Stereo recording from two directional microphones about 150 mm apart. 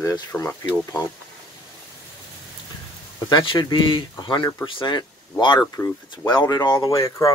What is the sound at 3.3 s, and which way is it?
Speech, 30° left (ahead or behind).